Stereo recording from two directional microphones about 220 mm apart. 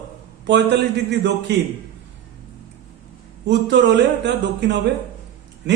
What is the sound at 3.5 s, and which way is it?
A man's voice, 55° right (ahead or behind).